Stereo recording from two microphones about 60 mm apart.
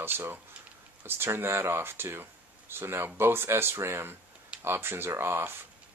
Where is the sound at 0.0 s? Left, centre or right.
Right.